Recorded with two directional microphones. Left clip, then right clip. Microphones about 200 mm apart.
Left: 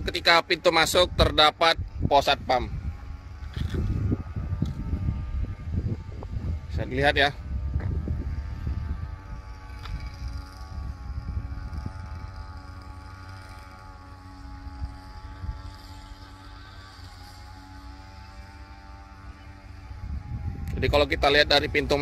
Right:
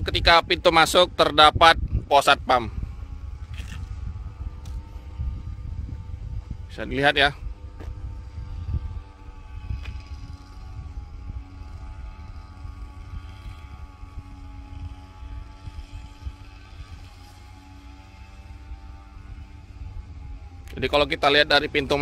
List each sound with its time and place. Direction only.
0.0 s speech: 15° right (ahead or behind)
6.8 s speech: 15° right (ahead or behind)
20.7 s speech: 10° right (ahead or behind)